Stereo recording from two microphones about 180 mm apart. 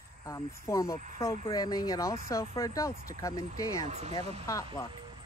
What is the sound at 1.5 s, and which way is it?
Speech, 20° left (ahead or behind).